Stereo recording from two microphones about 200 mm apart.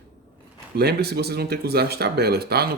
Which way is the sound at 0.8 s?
55° right (ahead or behind).